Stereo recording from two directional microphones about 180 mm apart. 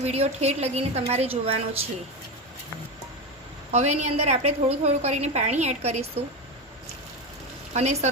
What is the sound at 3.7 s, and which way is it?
A woman's voice, 40° right (ahead or behind).